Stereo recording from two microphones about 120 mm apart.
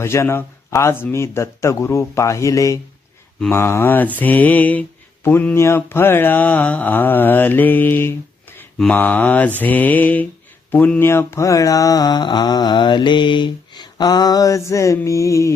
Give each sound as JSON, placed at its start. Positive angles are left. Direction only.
{"t": 0.0, "sound": "mantra", "side_deg": 20}
{"t": 3.5, "sound": "speech", "side_deg": 20}
{"t": 10.7, "sound": "mantra", "side_deg": 15}